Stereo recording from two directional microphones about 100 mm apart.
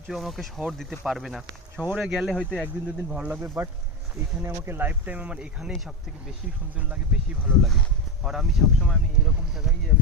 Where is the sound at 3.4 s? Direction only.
25° right (ahead or behind); by 5.7 s 10° right (ahead or behind).